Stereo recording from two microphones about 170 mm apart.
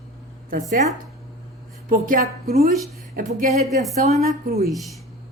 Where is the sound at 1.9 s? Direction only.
50° right (ahead or behind).